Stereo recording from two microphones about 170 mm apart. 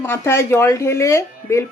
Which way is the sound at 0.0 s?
15° left (ahead or behind).